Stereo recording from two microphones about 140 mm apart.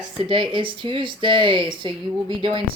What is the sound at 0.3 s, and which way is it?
Speech, 35° right (ahead or behind).